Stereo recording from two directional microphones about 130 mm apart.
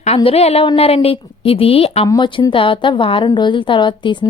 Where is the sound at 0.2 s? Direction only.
50° left (ahead or behind).